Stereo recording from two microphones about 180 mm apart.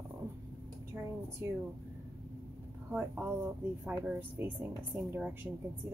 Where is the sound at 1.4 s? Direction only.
15° right (ahead or behind).